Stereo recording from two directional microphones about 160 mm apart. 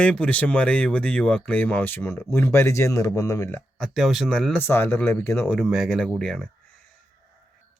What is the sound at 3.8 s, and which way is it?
Speech, centre (ahead or behind).